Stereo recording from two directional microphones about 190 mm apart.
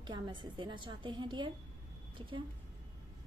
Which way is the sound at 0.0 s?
25° right (ahead or behind).